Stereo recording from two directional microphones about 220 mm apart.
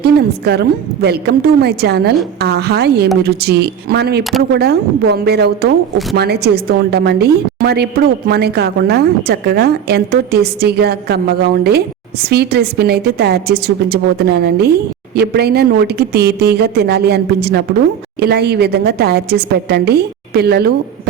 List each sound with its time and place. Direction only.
0.0 s a woman's voice: 45° right (ahead or behind)
4.2 s speech: centre (ahead or behind)
4.5 s a woman's voice: 45° right (ahead or behind)